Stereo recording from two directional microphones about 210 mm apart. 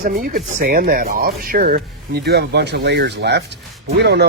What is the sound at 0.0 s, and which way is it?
Speech, 40° right (ahead or behind).